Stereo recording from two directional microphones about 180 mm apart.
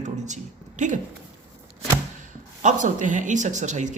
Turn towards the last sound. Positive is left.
turn(degrees=-40)  # may be behind; listen again after turning